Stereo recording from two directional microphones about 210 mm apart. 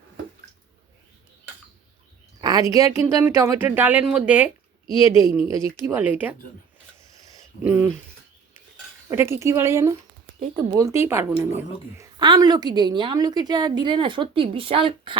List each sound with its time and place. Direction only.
2.4 s a woman's voice: 15° right (ahead or behind)
7.3 s a sound: 10° right (ahead or behind)
9.0 s a woman's voice: 10° right (ahead or behind)
10.4 s a woman's voice: 25° right (ahead or behind)
11.1 s a woman's voice: 10° right (ahead or behind); by 15.1 s 25° right (ahead or behind)